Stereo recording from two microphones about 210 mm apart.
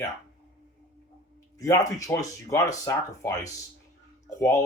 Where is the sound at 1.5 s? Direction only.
15° left (ahead or behind).